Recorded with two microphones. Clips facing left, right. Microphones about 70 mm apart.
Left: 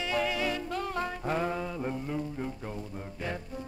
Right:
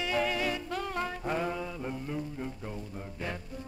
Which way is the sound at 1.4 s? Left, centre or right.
Left.